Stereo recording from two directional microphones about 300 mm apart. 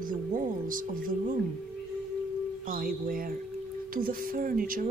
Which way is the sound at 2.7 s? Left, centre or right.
Right.